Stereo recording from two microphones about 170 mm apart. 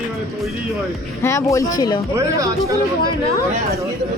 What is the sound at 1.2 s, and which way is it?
Speech, 20° left (ahead or behind).